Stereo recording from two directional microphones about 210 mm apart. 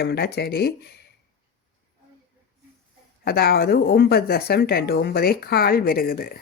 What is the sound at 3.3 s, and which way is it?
Speech, 45° left (ahead or behind).